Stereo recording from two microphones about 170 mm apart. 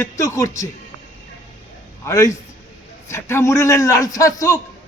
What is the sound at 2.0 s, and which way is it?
A man's voice, 15° left (ahead or behind).